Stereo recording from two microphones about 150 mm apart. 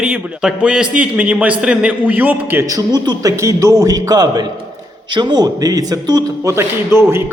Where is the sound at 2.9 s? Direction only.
25° right (ahead or behind).